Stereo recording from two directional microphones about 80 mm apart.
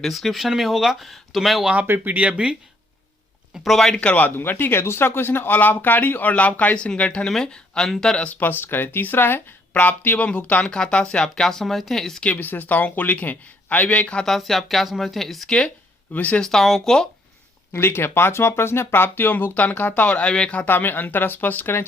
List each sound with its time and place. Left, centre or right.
0.0 s speech: centre
1.7 s speech: right
3.5 s speech: centre
4.0 s speech: left
8.4 s speech: left; by 12.3 s centre
12.3 s speech: left
16.1 s speech: centre
16.4 s speech: centre
17.7 s speech: left
20.7 s speech: left